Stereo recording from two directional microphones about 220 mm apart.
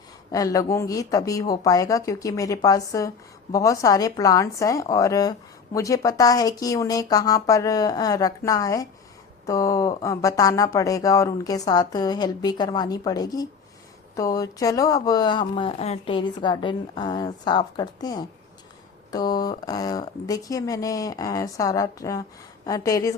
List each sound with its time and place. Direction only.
0.3 s speech: 15° left (ahead or behind)